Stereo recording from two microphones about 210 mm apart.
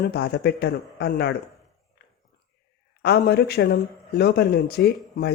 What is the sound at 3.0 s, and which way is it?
Speech, 50° left (ahead or behind).